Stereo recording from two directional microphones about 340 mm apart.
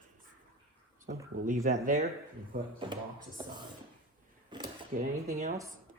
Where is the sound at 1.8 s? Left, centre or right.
Right.